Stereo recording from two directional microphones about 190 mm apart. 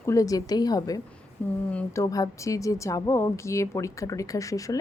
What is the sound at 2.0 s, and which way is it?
A woman's voice, 20° left (ahead or behind).